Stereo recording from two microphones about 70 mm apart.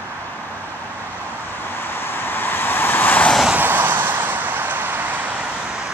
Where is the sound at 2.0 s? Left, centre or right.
Left.